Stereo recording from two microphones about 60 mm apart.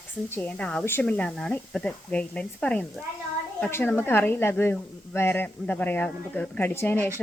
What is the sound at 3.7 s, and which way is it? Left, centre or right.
A woman's voice, left.